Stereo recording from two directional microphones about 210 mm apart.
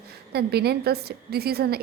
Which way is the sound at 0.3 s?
50° right (ahead or behind).